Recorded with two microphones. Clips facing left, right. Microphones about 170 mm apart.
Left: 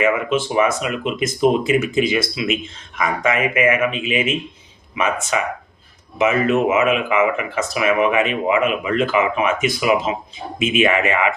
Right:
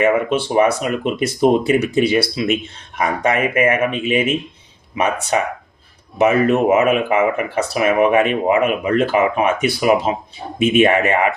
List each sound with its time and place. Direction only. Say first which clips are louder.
0.0 s speech: right 2 dB; 40° right (ahead or behind)